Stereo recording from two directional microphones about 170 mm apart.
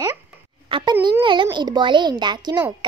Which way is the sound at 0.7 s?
30° right (ahead or behind).